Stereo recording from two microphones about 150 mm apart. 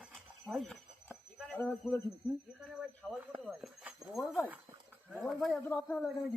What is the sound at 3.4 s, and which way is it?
Speech, centre (ahead or behind).